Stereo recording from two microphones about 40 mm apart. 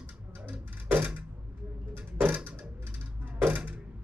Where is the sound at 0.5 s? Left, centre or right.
Right.